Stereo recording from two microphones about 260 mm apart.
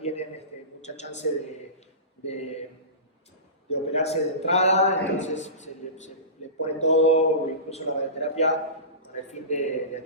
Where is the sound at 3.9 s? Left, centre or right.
Left.